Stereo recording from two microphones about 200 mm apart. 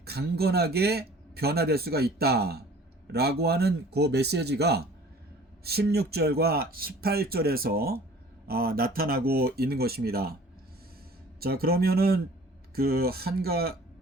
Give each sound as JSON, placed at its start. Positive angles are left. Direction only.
{"t": 0.0, "sound": "a man's voice", "side_deg": -55}
{"t": 11.3, "sound": "a man's voice", "side_deg": -50}